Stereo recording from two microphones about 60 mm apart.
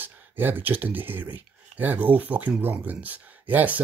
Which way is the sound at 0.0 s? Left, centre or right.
Right.